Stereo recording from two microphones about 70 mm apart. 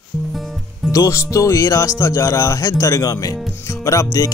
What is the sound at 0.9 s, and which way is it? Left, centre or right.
Speech, left.